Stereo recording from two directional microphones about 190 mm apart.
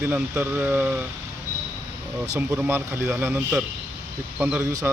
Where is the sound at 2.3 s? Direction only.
10° right (ahead or behind).